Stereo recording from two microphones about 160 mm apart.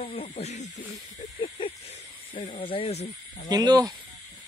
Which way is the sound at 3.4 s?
25° right (ahead or behind).